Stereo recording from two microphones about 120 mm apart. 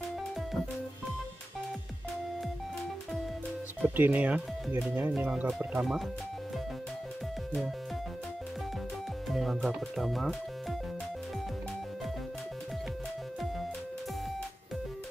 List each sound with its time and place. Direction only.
3.8 s speech: 15° right (ahead or behind)
9.3 s speech: centre (ahead or behind)